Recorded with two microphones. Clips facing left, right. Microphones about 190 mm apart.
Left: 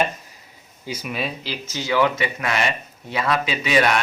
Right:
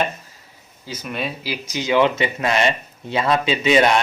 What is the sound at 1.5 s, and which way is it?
A man's voice, 15° right (ahead or behind).